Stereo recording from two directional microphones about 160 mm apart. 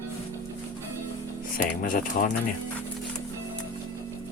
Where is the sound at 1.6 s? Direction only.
60° left (ahead or behind).